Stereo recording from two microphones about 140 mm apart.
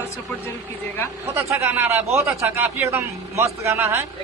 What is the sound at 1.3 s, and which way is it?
A man's voice, 15° right (ahead or behind).